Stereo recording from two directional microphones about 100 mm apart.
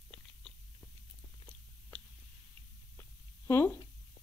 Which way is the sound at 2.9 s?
25° left (ahead or behind).